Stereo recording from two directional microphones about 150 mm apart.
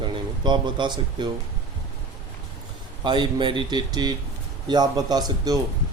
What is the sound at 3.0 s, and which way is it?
Speech, 30° right (ahead or behind).